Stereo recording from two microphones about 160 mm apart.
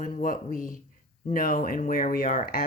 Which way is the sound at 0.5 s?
55° left (ahead or behind).